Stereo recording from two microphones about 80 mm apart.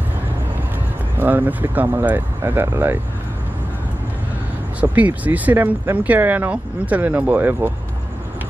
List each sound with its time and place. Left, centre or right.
1.1 s speech: right
4.7 s speech: centre